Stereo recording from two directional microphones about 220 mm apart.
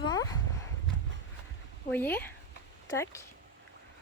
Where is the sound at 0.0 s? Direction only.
15° left (ahead or behind).